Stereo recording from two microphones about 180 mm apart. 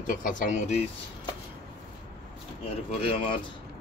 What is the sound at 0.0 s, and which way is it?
Speech, 50° left (ahead or behind).